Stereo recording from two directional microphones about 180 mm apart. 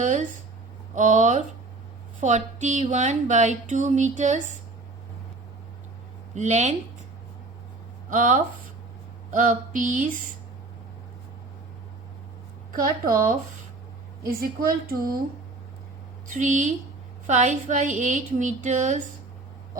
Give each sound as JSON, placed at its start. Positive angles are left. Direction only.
{"t": 0.0, "sound": "a woman's voice", "side_deg": -45}
{"t": 6.3, "sound": "speech", "side_deg": -40}
{"t": 8.1, "sound": "a woman's voice", "side_deg": -45}
{"t": 14.3, "sound": "a woman's voice", "side_deg": -55}
{"t": 16.2, "sound": "a woman's voice", "side_deg": -45}